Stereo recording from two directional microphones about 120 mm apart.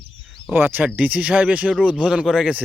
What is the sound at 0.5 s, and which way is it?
Speech, 15° right (ahead or behind).